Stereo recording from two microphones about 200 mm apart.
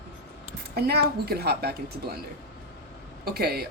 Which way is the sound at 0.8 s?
50° right (ahead or behind).